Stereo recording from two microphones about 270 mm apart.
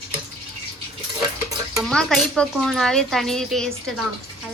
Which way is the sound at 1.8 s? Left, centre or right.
Centre.